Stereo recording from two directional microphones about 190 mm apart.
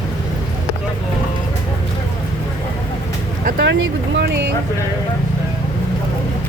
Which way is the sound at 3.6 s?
65° right (ahead or behind).